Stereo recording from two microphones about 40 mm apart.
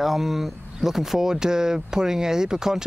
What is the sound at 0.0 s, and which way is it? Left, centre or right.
Speech, centre.